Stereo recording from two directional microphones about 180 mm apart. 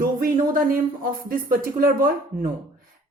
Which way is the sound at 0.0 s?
50° right (ahead or behind).